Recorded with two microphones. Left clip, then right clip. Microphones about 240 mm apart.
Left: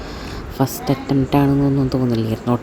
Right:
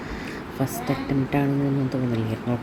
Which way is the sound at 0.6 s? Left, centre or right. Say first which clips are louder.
Left 7 dB; left.